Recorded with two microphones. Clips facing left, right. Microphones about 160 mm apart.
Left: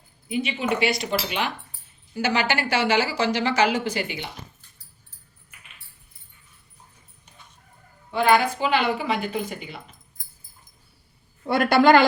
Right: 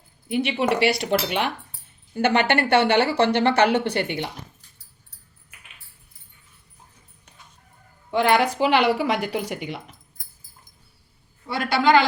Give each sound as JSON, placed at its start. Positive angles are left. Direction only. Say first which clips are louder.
{"t": 0.3, "sound": "a woman's voice", "louder": "right 3 dB", "side_deg": -65}
{"t": 8.1, "sound": "a woman's voice", "louder": "even", "side_deg": -75}
{"t": 11.4, "sound": "a man's voice", "louder": "left 4 dB", "side_deg": 55}